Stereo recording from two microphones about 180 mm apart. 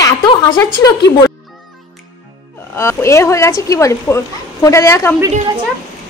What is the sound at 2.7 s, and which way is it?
Speech, 15° left (ahead or behind).